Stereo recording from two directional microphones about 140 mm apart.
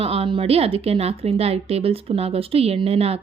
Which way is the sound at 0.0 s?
45° right (ahead or behind).